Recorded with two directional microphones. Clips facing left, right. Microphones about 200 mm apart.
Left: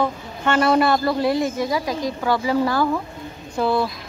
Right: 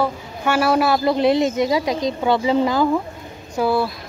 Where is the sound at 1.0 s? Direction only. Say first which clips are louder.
Right 3 dB; 20° right (ahead or behind).